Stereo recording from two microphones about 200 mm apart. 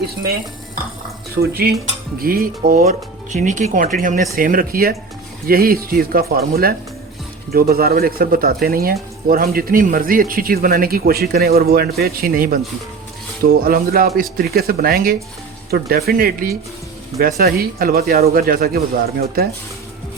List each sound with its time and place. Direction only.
1.4 s speech: 50° right (ahead or behind)